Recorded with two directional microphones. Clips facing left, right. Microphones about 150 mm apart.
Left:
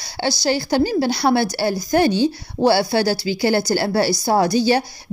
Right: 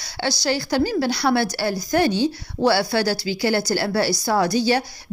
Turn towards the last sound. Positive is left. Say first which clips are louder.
# left 3 dB
turn(degrees=25)  # may be behind; listen again after turning